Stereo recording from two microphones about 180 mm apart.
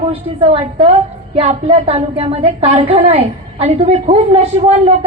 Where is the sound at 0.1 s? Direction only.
35° right (ahead or behind).